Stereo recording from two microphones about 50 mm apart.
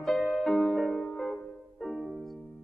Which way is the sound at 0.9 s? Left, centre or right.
Centre.